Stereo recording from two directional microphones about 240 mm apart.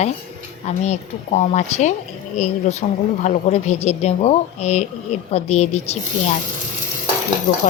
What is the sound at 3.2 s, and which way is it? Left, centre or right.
A woman's voice, left.